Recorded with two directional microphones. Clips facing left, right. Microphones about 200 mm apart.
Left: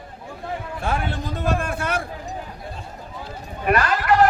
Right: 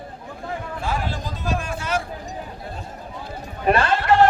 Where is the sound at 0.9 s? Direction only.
60° left (ahead or behind).